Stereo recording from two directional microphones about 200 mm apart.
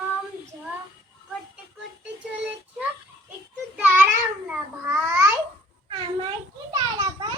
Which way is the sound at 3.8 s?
10° right (ahead or behind).